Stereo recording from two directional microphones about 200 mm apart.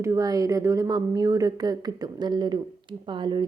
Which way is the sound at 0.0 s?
15° right (ahead or behind).